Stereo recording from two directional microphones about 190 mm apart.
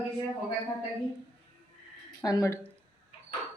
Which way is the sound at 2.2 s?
15° left (ahead or behind).